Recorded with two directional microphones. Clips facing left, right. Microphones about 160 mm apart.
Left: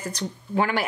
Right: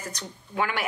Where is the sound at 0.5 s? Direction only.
35° left (ahead or behind).